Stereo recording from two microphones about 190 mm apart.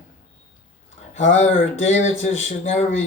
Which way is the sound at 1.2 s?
35° left (ahead or behind).